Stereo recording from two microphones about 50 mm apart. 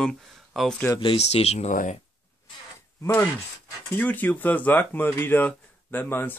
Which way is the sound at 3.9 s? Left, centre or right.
Left.